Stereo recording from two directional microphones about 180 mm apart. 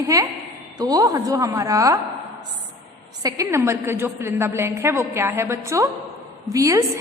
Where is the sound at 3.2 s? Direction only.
20° right (ahead or behind).